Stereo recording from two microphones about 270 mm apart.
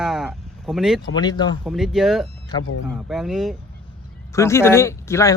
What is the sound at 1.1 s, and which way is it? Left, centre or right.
Speech, centre.